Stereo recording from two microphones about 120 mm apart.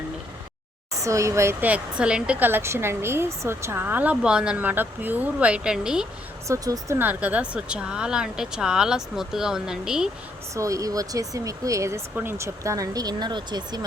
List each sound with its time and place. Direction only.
0.9 s speech: 25° right (ahead or behind); by 6.1 s 5° right (ahead or behind)
6.5 s speech: 25° right (ahead or behind); by 10.1 s 5° right (ahead or behind)
10.5 s speech: 25° right (ahead or behind)